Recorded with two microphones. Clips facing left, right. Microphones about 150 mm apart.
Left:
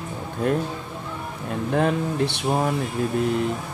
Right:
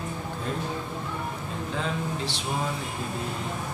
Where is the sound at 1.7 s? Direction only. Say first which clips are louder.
Left 9 dB; 60° left (ahead or behind).